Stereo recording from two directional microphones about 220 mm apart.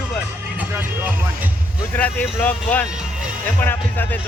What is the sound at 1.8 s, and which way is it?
Speech, 10° left (ahead or behind).